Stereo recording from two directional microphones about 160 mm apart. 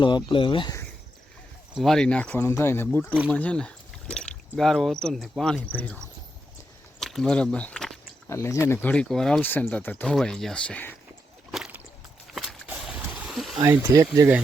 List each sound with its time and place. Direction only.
0.3 s speech: 30° left (ahead or behind)
1.7 s speech: centre (ahead or behind)
7.0 s speech: centre (ahead or behind)
8.3 s speech: 15° left (ahead or behind)
11.5 s a sound: 5° right (ahead or behind)
12.3 s boat: 5° right (ahead or behind)
13.6 s speech: 20° right (ahead or behind)